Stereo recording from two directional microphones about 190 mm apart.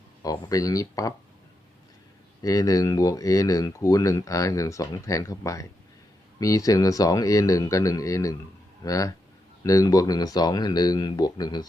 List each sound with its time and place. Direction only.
0.2 s speech: 20° left (ahead or behind)
2.4 s speech: 20° left (ahead or behind)